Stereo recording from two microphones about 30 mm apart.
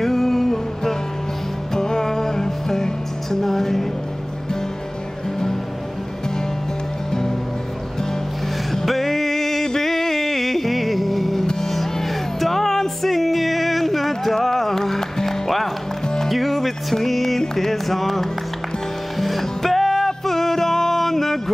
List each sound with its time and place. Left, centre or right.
0.0 s music: centre
1.7 s music: centre
7.1 s music: centre
8.8 s music: centre